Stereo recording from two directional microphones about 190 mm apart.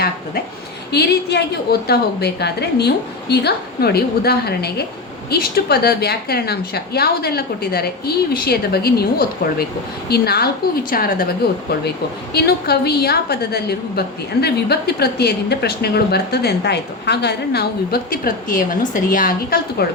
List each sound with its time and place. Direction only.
0.9 s a woman's voice: 60° left (ahead or behind)
12.3 s a woman's voice: 55° left (ahead or behind)